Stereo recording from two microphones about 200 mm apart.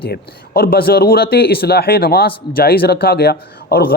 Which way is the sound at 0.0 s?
50° left (ahead or behind).